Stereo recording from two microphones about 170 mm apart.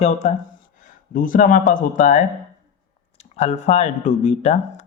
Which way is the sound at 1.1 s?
55° left (ahead or behind).